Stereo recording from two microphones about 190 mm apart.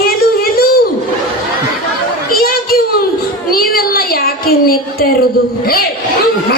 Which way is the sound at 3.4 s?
50° left (ahead or behind).